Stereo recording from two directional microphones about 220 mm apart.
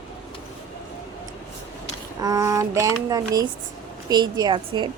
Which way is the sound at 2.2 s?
15° right (ahead or behind).